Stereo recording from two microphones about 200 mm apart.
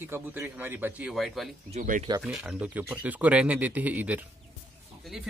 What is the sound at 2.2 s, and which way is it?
Speech, 5° right (ahead or behind).